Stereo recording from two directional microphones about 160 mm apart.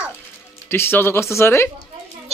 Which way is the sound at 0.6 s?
15° left (ahead or behind).